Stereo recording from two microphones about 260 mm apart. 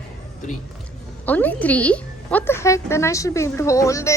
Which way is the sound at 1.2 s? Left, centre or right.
Centre.